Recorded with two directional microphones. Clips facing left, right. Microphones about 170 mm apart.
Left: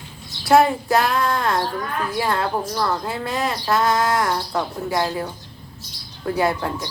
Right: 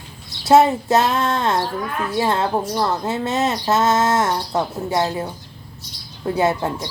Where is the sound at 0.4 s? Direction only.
20° right (ahead or behind).